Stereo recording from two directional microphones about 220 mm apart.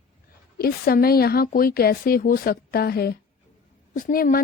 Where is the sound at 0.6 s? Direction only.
45° left (ahead or behind).